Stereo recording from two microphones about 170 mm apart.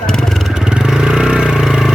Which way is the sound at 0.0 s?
5° left (ahead or behind).